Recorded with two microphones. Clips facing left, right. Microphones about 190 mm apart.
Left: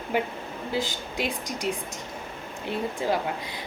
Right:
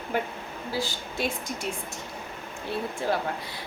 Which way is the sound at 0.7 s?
20° left (ahead or behind).